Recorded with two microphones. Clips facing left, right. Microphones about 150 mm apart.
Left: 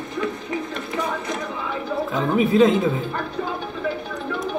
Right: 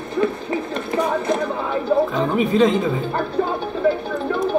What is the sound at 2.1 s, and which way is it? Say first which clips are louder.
Speech: even; centre (ahead or behind).